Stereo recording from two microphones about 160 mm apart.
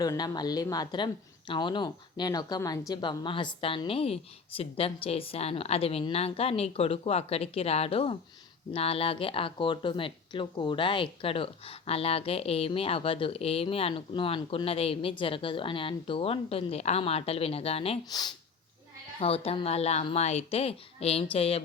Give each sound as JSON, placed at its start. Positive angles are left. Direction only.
{"t": 0.0, "sound": "speech", "side_deg": 25}
{"t": 18.1, "sound": "speech", "side_deg": 25}
{"t": 19.2, "sound": "speech", "side_deg": 35}